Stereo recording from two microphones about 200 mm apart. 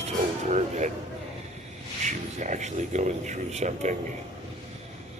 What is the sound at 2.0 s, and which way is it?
Speech, 40° right (ahead or behind).